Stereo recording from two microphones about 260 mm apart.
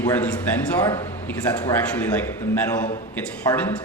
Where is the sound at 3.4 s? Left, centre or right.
Centre.